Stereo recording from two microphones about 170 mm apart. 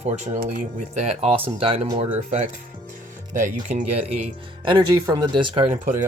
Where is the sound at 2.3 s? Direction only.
45° right (ahead or behind).